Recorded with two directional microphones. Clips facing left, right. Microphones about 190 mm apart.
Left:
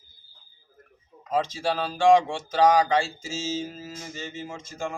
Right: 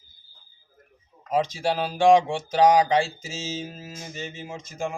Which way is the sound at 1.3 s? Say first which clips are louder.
Right 2 dB; 15° right (ahead or behind).